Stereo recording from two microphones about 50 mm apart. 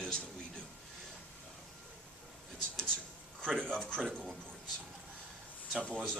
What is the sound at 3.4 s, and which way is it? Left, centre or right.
Speech, centre.